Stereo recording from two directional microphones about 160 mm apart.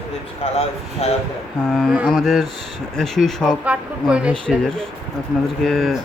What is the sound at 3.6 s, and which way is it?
Speech, 5° right (ahead or behind).